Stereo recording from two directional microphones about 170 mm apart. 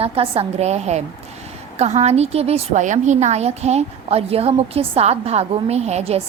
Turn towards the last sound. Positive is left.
turn(degrees=-40)  # may be behind; listen again after turning